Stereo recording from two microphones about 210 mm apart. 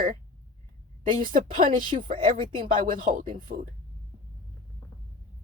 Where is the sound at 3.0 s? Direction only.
40° right (ahead or behind).